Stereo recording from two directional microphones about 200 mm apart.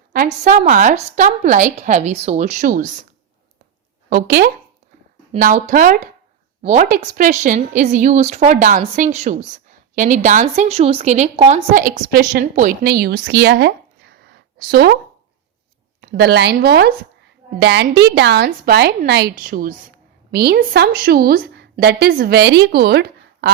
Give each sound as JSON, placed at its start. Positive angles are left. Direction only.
{"t": 0.4, "sound": "a woman's voice", "side_deg": -40}
{"t": 4.1, "sound": "a woman's voice", "side_deg": -45}
{"t": 16.0, "sound": "a woman's voice", "side_deg": -55}